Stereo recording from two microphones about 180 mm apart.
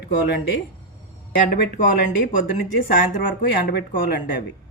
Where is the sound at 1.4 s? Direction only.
70° left (ahead or behind).